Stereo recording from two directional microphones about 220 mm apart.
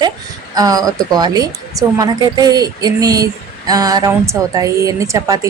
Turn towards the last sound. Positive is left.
turn(degrees=-15)  # may be behind; listen again after turning